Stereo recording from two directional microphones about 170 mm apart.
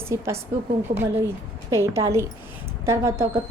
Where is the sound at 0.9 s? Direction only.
50° right (ahead or behind).